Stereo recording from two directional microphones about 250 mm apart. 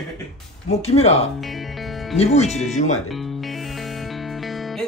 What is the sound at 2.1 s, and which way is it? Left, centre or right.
Speech, left.